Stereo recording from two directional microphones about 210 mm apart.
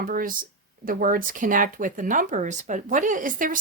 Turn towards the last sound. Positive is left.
turn(degrees=-40)  # may be behind; listen again after turning